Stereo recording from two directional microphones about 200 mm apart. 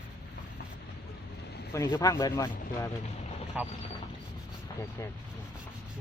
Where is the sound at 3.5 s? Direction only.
5° right (ahead or behind).